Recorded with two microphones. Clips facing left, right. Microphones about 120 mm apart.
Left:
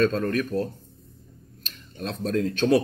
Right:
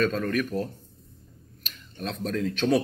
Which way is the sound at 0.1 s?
35° left (ahead or behind).